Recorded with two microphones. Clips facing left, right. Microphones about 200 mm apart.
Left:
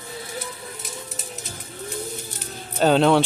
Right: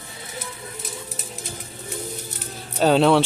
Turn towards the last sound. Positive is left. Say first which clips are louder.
# even
turn(degrees=0)  # may be behind; listen again after turning